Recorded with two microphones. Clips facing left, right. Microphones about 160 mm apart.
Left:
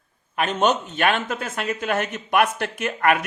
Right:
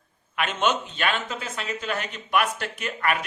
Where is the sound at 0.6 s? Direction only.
45° left (ahead or behind).